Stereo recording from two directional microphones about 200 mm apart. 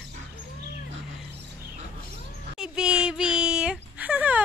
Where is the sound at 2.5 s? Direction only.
5° right (ahead or behind).